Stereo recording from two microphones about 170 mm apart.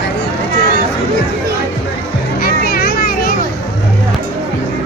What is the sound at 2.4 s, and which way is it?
Children playing, 60° left (ahead or behind).